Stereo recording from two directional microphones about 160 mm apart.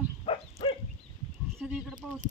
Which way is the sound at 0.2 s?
35° left (ahead or behind).